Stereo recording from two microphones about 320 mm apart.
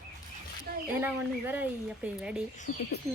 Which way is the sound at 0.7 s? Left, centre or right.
Right.